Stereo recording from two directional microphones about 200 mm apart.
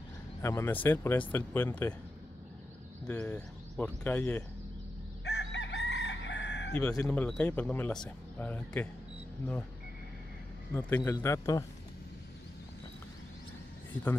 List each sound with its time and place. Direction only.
0.4 s speech: 15° left (ahead or behind)
3.1 s speech: 10° left (ahead or behind)
5.2 s chicken: 60° left (ahead or behind)
6.7 s a man's voice: 5° left (ahead or behind)
10.7 s speech: 10° left (ahead or behind)